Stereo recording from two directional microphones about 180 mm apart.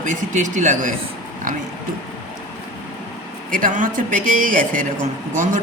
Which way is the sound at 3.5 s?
50° right (ahead or behind).